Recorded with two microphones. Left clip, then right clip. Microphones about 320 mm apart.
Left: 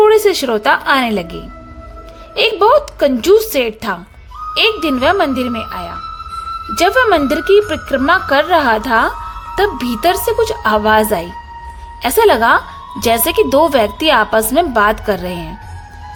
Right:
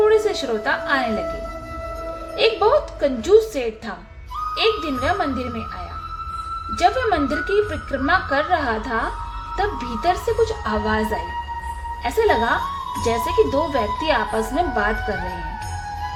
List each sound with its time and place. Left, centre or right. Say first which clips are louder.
0.0 s a woman's voice: left 7 dB; left
2.3 s a woman's voice: left 7 dB; left
12.0 s a woman's voice: left 8 dB; left